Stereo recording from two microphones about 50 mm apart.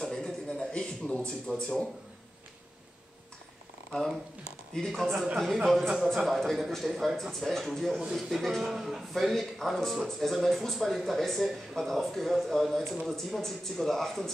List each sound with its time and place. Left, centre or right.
0.0 s a sound: centre
1.5 s speech: centre
4.7 s speech: centre